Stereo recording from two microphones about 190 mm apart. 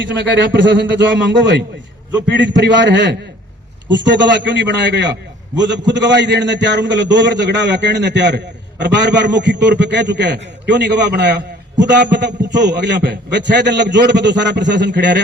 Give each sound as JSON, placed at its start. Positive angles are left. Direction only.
{"t": 0.5, "sound": "a man's voice", "side_deg": -70}